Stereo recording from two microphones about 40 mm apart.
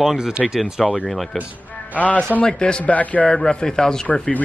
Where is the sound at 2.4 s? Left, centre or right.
Left.